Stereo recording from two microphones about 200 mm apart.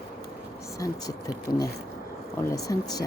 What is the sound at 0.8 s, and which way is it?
Speech, 20° left (ahead or behind).